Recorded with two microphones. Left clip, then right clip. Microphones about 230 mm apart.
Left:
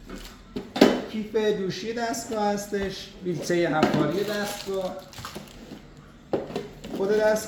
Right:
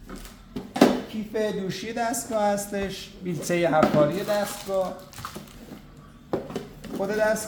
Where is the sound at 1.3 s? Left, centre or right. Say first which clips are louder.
Left 3 dB; right.